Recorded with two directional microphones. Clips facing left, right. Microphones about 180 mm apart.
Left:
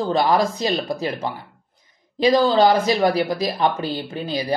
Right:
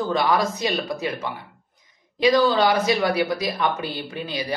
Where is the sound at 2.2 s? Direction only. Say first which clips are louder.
Left 2 dB; 30° left (ahead or behind).